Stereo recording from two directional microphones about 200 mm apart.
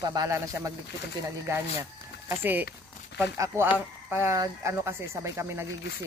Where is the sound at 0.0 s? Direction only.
20° right (ahead or behind).